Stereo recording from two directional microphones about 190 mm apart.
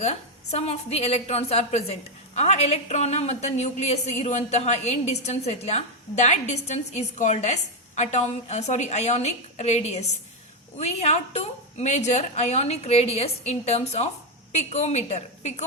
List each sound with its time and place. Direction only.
0.0 s a woman's voice: 35° left (ahead or behind)